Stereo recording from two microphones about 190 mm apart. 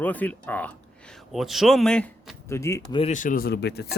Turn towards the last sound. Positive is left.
turn(degrees=60)  # may be behind; listen again after turning